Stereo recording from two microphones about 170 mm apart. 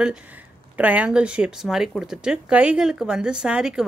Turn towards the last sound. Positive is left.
turn(degrees=-5)  # may be behind; listen again after turning